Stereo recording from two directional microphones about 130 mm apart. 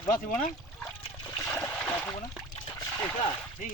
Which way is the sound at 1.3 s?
20° left (ahead or behind).